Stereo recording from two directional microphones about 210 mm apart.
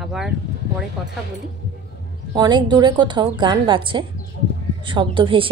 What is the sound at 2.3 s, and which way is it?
A woman's voice, 20° right (ahead or behind).